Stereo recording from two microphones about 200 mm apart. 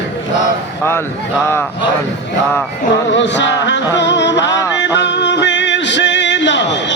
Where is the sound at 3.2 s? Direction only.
65° left (ahead or behind).